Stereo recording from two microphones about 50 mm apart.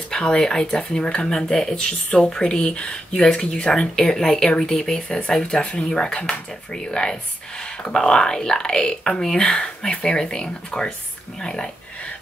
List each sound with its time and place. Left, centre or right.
0.1 s speech: centre